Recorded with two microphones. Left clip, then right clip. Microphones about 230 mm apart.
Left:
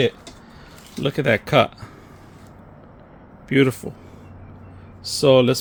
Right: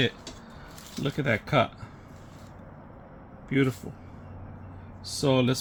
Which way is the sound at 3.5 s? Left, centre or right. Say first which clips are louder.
Left 9 dB; left.